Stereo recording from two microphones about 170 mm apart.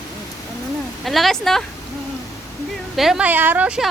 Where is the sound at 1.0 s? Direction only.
Centre (ahead or behind).